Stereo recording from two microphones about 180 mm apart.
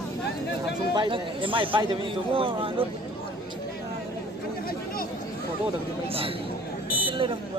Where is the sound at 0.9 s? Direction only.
30° right (ahead or behind).